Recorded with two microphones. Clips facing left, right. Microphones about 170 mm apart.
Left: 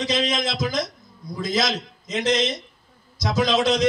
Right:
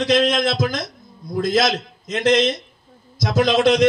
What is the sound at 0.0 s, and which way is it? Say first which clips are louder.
A man's voice: right 6 dB; 60° right (ahead or behind).